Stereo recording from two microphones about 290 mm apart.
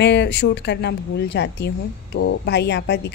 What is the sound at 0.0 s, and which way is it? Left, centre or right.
Speech, left.